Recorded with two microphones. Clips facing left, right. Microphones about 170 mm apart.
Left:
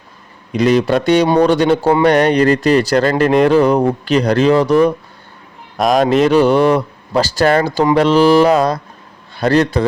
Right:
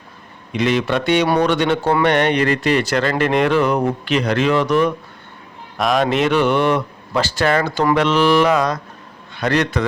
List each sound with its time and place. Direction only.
0.5 s a man's voice: 40° left (ahead or behind)